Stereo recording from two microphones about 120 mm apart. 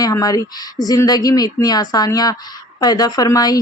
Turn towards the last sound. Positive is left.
turn(degrees=30)  # may be behind; listen again after turning